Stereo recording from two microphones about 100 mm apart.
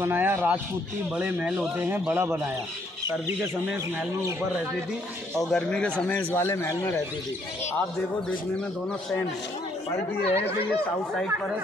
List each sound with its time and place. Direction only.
0.0 s a man's voice: 25° right (ahead or behind)
1.1 s speech: 10° right (ahead or behind)
1.8 s a man's voice: 25° right (ahead or behind)
5.4 s speech: 5° left (ahead or behind)
6.3 s a man's voice: 25° left (ahead or behind)
9.9 s speech: 90° left